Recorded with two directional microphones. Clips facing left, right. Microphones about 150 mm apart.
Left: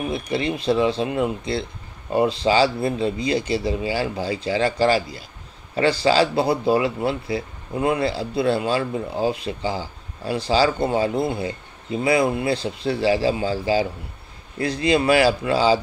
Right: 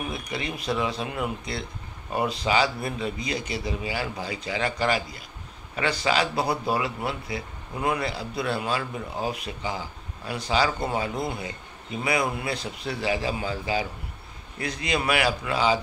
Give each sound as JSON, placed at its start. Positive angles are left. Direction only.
{"t": 0.1, "sound": "speech", "side_deg": 30}